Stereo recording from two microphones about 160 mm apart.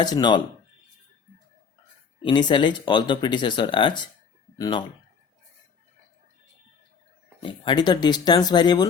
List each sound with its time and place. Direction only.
0.0 s speech: 25° left (ahead or behind)
2.2 s speech: 30° left (ahead or behind)
7.4 s speech: 30° left (ahead or behind)